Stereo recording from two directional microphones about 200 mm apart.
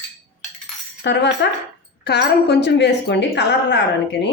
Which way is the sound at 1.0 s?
60° left (ahead or behind).